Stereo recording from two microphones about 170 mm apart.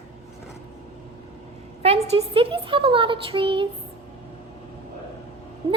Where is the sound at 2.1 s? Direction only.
35° right (ahead or behind).